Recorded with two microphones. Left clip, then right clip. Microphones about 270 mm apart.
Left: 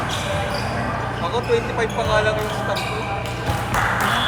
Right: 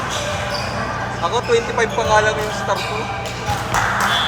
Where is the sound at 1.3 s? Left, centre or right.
Right.